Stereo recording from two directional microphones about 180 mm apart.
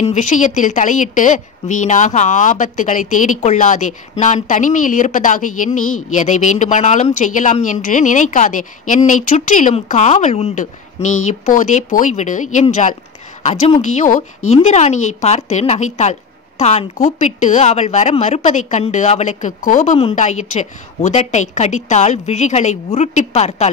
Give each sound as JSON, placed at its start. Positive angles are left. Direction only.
{"t": 0.0, "sound": "a woman's voice", "side_deg": 40}